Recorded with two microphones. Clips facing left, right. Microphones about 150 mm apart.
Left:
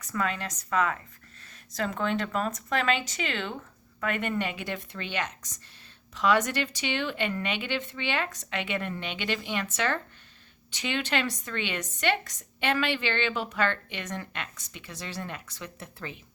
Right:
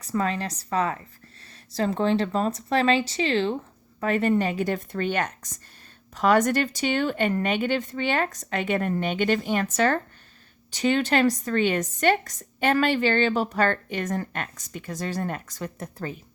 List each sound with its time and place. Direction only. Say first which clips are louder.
0.0 s speech: right 5 dB; 35° right (ahead or behind)